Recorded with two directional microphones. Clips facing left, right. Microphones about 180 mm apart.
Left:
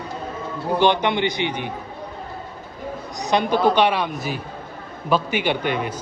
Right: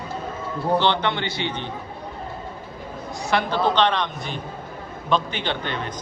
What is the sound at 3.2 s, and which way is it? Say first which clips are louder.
A man's voice: left 3 dB; 15° left (ahead or behind).